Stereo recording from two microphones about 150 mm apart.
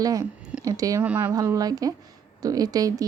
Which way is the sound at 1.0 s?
10° right (ahead or behind).